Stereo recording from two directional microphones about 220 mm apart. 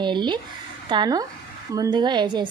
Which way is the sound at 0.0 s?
20° right (ahead or behind).